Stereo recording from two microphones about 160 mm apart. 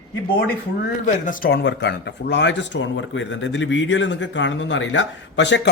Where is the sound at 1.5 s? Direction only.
90° left.